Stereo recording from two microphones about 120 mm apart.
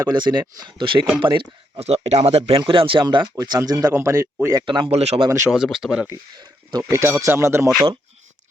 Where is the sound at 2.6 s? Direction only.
45° right (ahead or behind); by 4.3 s 25° right (ahead or behind).